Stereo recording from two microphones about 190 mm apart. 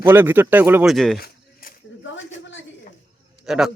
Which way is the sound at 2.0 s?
80° left.